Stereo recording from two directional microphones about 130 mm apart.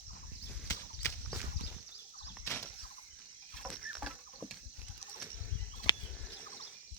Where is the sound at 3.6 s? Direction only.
5° right (ahead or behind).